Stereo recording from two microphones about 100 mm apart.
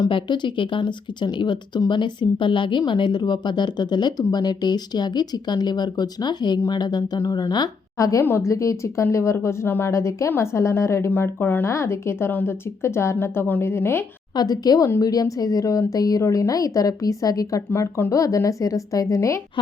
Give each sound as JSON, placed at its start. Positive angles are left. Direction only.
{"t": 0.1, "sound": "speech", "side_deg": 55}
{"t": 8.0, "sound": "speech", "side_deg": 30}
{"t": 14.3, "sound": "a woman's voice", "side_deg": 40}